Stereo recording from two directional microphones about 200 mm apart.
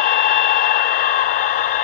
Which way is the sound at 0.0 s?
50° left (ahead or behind).